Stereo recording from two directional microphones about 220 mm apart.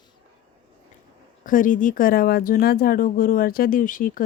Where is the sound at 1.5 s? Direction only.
35° left (ahead or behind).